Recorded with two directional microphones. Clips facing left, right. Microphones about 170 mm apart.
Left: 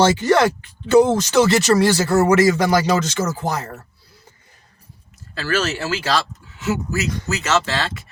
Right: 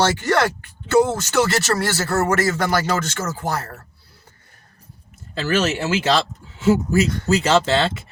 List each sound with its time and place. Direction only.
0.0 s speech: 15° left (ahead or behind)
5.3 s speech: 20° right (ahead or behind)